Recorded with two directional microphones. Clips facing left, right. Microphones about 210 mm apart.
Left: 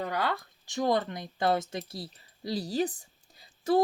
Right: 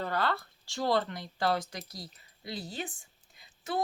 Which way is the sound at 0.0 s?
15° left (ahead or behind).